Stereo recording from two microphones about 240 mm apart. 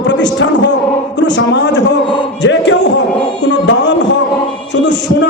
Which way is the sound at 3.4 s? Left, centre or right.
Left.